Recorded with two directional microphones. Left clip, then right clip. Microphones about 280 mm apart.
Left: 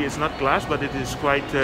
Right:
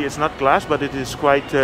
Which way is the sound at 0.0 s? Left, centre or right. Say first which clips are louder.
Right 4 dB; centre.